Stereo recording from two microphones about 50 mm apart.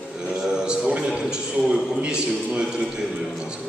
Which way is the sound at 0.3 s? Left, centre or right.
Centre.